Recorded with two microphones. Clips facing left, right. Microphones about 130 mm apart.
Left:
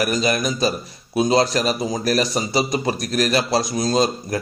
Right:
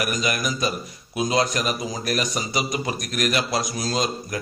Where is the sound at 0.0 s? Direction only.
30° left (ahead or behind).